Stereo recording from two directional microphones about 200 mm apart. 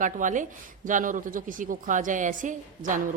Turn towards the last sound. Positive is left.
turn(degrees=-40)  # may be behind; listen again after turning